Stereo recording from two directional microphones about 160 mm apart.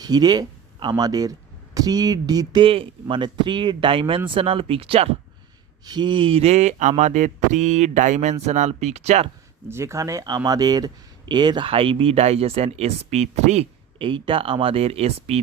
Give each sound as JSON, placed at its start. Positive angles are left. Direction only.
{"t": 0.0, "sound": "speech", "side_deg": -25}
{"t": 9.6, "sound": "speech", "side_deg": -15}